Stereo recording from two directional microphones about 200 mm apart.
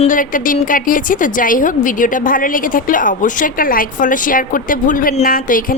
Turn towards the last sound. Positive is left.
turn(degrees=45)  # may be behind; listen again after turning